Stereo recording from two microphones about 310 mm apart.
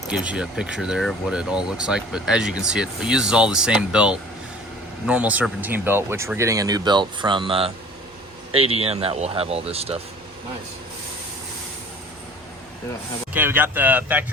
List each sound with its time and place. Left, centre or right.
0.1 s speech: centre
8.8 s speech: centre
13.3 s speech: centre